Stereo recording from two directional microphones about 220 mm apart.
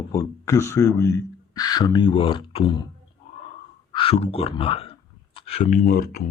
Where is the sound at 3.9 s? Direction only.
25° left (ahead or behind).